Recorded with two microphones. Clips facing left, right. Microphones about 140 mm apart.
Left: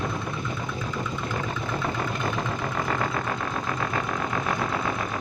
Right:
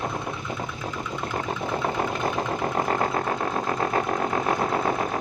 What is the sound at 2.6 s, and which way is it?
Engine, 35° right (ahead or behind).